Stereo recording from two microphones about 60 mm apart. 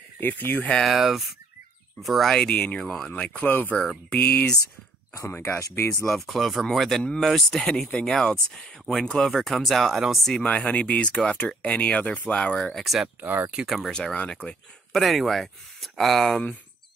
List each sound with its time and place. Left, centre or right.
0.2 s speech: left
0.8 s speech: centre
2.5 s speech: centre
2.8 s speech: centre
3.4 s speech: left
5.2 s speech: left
6.0 s speech: centre
10.4 s speech: centre
12.7 s speech: centre
13.2 s speech: right
13.7 s speech: centre
13.9 s speech: centre
14.9 s speech: centre